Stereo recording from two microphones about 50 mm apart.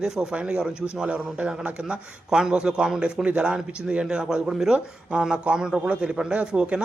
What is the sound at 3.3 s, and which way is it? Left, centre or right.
Speech, right.